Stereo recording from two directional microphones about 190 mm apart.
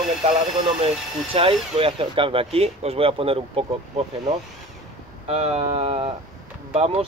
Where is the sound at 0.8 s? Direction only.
30° right (ahead or behind).